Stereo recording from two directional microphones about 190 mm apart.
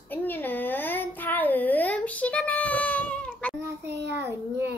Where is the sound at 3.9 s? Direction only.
65° right (ahead or behind).